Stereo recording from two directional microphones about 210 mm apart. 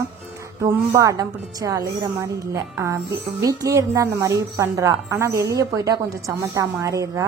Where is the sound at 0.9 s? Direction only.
15° right (ahead or behind).